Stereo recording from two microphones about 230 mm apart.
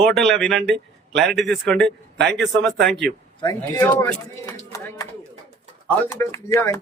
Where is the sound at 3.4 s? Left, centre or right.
Centre.